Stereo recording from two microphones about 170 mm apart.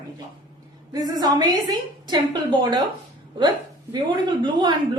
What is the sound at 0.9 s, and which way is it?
Speech, 20° right (ahead or behind).